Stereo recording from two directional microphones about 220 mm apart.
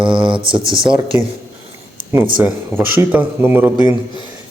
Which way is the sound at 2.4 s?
10° right (ahead or behind).